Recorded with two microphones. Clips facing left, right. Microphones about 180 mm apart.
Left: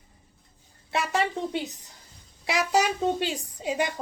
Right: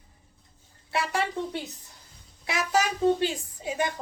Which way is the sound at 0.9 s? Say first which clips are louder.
Left 2 dB; 20° left (ahead or behind).